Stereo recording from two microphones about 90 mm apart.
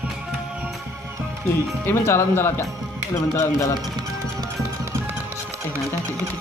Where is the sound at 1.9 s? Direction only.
25° left (ahead or behind).